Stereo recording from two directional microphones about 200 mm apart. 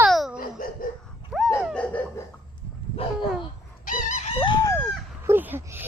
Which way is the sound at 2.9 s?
25° left (ahead or behind).